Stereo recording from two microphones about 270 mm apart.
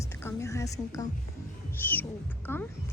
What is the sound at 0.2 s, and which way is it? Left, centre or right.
A woman's voice, centre.